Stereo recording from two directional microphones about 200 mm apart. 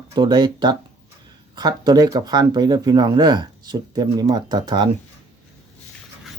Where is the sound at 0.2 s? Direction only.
20° right (ahead or behind).